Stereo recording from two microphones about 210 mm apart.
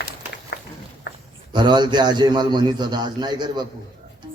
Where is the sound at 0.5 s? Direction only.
45° left (ahead or behind).